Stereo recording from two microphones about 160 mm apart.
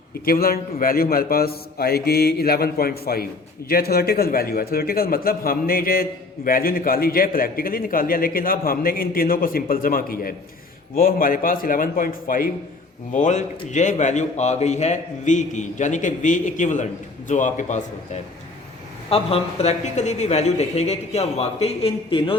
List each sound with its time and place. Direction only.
0.3 s a man's voice: 70° left (ahead or behind)
13.1 s a man's voice: 50° left (ahead or behind)